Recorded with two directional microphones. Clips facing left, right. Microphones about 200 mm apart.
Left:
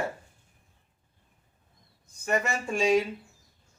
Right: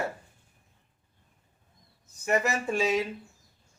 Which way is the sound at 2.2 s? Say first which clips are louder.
Right 2 dB; 5° right (ahead or behind).